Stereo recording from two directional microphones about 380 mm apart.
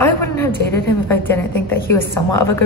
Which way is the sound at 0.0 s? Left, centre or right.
Centre.